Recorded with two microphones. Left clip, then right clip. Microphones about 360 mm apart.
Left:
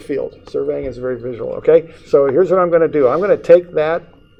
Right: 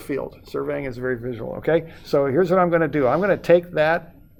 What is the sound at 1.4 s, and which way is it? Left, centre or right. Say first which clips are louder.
Speech: left 11 dB; right.